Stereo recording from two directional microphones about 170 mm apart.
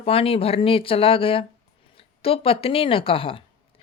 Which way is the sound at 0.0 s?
35° left (ahead or behind).